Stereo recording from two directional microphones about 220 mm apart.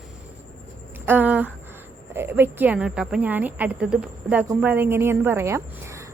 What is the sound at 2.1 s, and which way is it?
A woman's voice, 10° right (ahead or behind).